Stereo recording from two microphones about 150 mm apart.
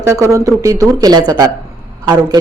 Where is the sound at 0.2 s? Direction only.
20° right (ahead or behind).